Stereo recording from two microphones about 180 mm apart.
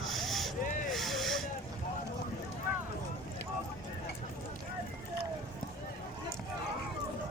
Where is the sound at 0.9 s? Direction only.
Centre (ahead or behind).